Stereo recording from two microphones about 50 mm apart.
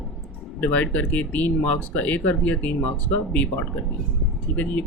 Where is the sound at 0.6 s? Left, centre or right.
Left.